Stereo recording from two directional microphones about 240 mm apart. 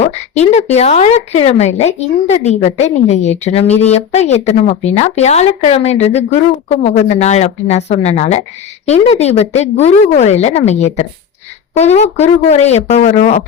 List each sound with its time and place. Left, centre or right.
0.0 s speech: left